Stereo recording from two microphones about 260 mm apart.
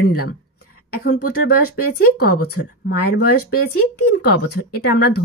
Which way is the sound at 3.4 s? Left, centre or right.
Left.